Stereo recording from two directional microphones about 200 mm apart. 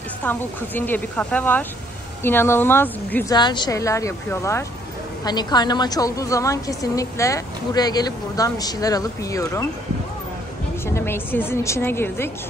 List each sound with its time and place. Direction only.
0.2 s a woman's voice: 10° left (ahead or behind)
3.3 s a woman's voice: 20° left (ahead or behind)
10.9 s a woman's voice: 10° left (ahead or behind)